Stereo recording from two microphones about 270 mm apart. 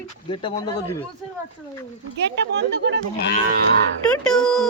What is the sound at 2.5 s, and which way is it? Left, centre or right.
Speech, right.